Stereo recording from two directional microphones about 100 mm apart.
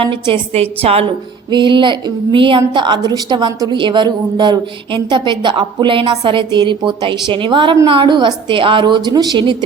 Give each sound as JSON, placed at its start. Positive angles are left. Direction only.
{"t": 0.0, "sound": "a woman's voice", "side_deg": -60}
{"t": 1.5, "sound": "a woman's voice", "side_deg": -55}